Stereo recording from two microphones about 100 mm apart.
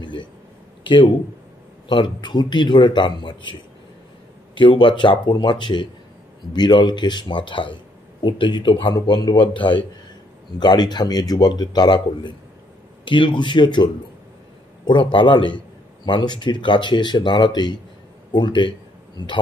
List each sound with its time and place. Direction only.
0.0 s a sound: 55° left (ahead or behind)
0.8 s a man's voice: 50° left (ahead or behind)
4.6 s a man's voice: 55° left (ahead or behind)
14.9 s a man's voice: 55° left (ahead or behind)